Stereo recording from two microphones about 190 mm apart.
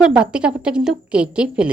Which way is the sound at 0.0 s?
5° right (ahead or behind).